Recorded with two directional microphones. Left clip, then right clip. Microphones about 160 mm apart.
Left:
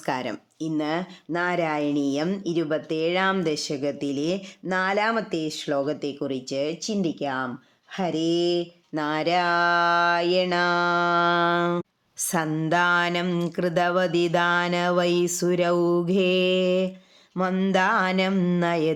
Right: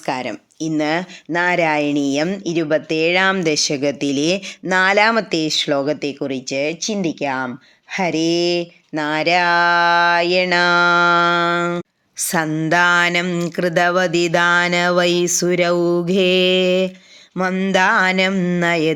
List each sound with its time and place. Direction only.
0.0 s speech: 5° left (ahead or behind)
0.6 s speech: 20° right (ahead or behind)